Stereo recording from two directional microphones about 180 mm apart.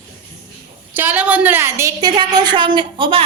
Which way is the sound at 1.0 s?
10° right (ahead or behind).